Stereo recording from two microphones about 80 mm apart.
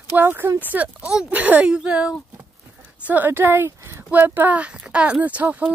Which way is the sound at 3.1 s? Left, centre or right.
Right.